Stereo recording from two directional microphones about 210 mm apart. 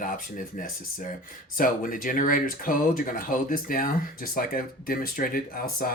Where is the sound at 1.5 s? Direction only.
40° left (ahead or behind).